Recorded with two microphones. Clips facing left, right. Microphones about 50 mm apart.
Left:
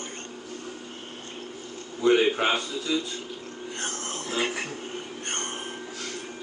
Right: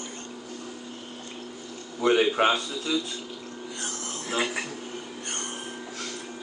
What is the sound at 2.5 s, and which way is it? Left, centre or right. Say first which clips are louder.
Speech: right 1 dB; left.